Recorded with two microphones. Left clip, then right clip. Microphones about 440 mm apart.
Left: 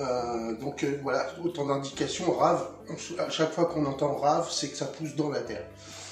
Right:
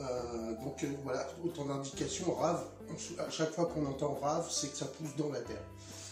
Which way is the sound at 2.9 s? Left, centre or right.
Left.